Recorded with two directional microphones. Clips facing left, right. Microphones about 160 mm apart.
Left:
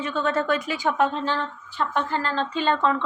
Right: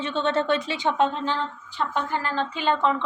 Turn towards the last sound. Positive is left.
turn(degrees=-15)  # may be behind; listen again after turning